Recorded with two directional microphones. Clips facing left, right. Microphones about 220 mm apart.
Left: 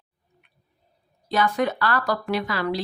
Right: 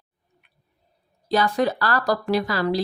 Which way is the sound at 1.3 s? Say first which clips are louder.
Right 2 dB; 35° right (ahead or behind).